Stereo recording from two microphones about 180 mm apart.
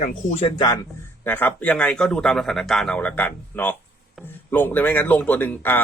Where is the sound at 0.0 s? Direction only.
40° left (ahead or behind).